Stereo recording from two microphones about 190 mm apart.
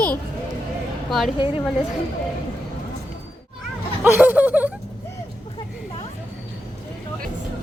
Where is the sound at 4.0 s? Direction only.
10° right (ahead or behind).